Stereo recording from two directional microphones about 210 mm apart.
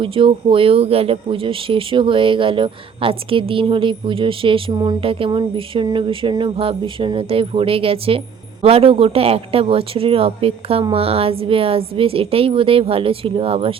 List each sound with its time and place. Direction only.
0.0 s speech: 25° right (ahead or behind)